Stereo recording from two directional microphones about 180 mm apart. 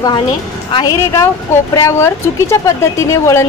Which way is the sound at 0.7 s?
25° left (ahead or behind).